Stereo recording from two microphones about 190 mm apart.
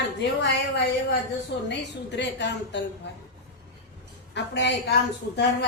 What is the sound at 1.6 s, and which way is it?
A woman's voice, 65° left (ahead or behind).